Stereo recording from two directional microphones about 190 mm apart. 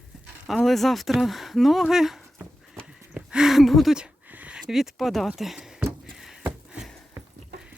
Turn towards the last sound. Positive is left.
turn(degrees=-5)  # may be behind; listen again after turning